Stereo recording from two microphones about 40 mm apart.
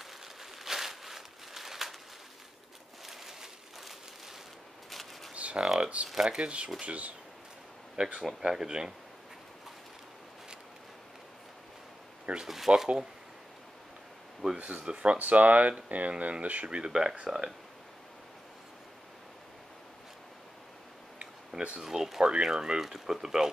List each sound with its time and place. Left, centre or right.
0.0 s a sound: centre
3.1 s a sound: centre
5.3 s a sound: right
5.8 s speech: right
6.0 s speech: centre
6.3 s speech: right
8.0 s speech: right
12.4 s speech: centre
14.5 s speech: right
16.7 s speech: centre
21.5 s speech: centre
22.2 s speech: right